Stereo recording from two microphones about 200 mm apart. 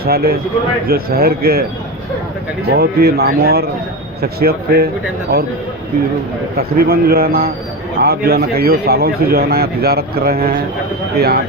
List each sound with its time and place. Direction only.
0.0 s speech: 50° right (ahead or behind)
2.7 s speech: 50° right (ahead or behind)
6.6 s speech: 50° right (ahead or behind)